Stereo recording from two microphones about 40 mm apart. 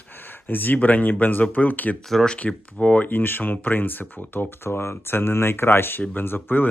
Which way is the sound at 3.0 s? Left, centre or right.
Left.